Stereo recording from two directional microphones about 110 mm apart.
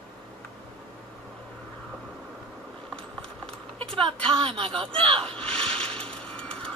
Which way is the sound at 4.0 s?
50° right (ahead or behind).